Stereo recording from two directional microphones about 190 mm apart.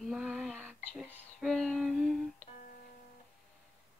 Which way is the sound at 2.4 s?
45° left (ahead or behind).